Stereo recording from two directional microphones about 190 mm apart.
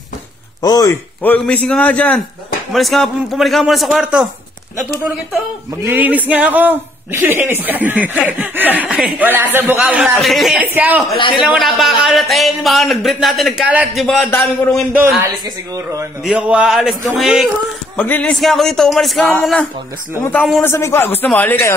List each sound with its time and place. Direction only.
0.6 s a man's voice: 20° left (ahead or behind); by 4.3 s 5° right (ahead or behind)
5.9 s a man's voice: 10° right (ahead or behind)
11.1 s a man's voice: 25° left (ahead or behind)
11.4 s speech: centre (ahead or behind)
14.0 s a man's voice: 5° left (ahead or behind); by 16.1 s 15° right (ahead or behind)
16.3 s speech: 5° right (ahead or behind)
17.9 s a man's voice: 10° left (ahead or behind)